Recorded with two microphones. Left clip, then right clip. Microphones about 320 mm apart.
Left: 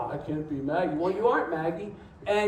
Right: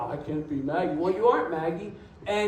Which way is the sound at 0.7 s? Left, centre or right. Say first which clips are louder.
Even; centre.